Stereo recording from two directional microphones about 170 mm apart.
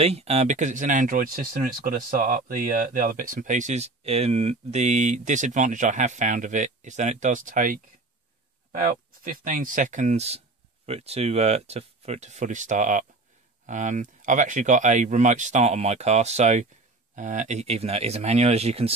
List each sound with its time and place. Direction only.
0.0 s speech: 35° right (ahead or behind); by 7.8 s 55° right (ahead or behind)
8.8 s speech: 55° right (ahead or behind); by 18.9 s 35° right (ahead or behind)